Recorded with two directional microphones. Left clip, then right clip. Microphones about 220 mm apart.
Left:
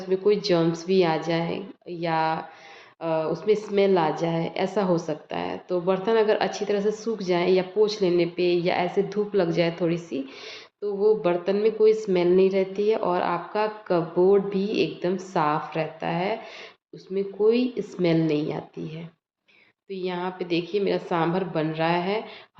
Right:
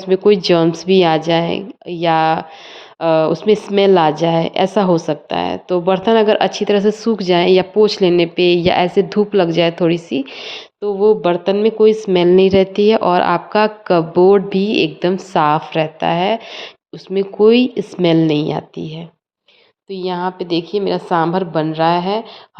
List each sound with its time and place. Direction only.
0.0 s speech: 40° right (ahead or behind)